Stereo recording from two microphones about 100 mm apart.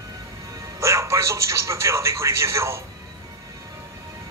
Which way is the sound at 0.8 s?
30° right (ahead or behind).